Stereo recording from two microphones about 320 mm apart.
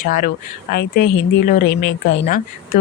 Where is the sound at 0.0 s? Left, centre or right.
Left.